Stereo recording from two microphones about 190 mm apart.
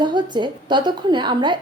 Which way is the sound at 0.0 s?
25° right (ahead or behind).